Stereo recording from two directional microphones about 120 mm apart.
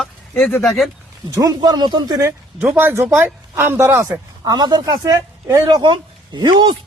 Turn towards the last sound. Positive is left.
turn(degrees=-40)  # may be behind; listen again after turning